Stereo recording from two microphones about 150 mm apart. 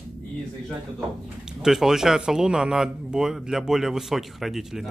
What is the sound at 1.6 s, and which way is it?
Speech, 5° right (ahead or behind).